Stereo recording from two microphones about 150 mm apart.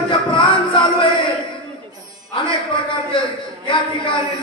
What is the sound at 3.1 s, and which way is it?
Music, 35° left (ahead or behind).